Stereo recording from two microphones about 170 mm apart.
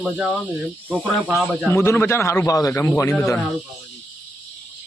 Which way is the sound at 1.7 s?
15° left (ahead or behind).